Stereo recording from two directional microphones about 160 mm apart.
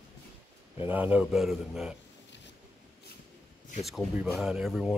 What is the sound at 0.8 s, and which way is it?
A man's voice, 10° right (ahead or behind).